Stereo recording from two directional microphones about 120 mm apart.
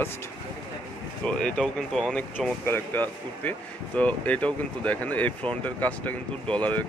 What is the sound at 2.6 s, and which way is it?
Speech, 15° left (ahead or behind).